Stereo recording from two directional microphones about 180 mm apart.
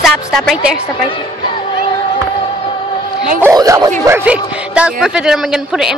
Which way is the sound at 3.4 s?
20° right (ahead or behind).